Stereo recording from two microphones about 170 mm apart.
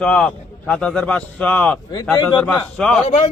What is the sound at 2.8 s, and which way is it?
Speech, 5° left (ahead or behind).